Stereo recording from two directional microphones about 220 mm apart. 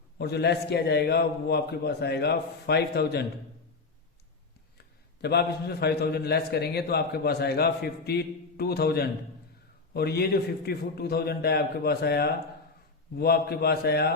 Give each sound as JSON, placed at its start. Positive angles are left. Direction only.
{"t": 0.2, "sound": "a man's voice", "side_deg": 50}
{"t": 5.2, "sound": "a man's voice", "side_deg": 45}